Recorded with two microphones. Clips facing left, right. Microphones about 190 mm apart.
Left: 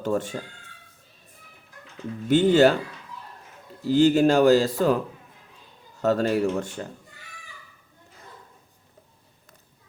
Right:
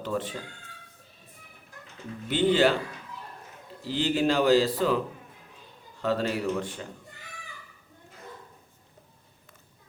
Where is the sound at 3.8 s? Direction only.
45° left (ahead or behind).